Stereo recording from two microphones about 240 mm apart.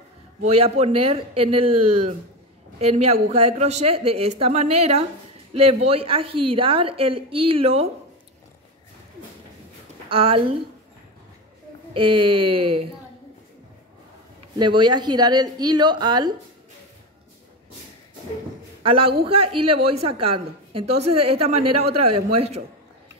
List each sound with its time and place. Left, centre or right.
0.5 s a woman's voice: right
10.0 s speech: right
11.9 s a woman's voice: right
14.6 s a woman's voice: centre
18.8 s a woman's voice: right